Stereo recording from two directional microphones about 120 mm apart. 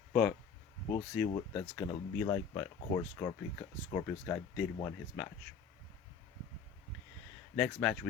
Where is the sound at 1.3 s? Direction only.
40° left (ahead or behind).